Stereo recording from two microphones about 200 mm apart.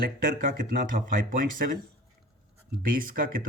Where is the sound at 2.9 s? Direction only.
45° right (ahead or behind).